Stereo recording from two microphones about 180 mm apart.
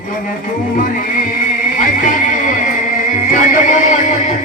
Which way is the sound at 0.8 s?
50° left (ahead or behind).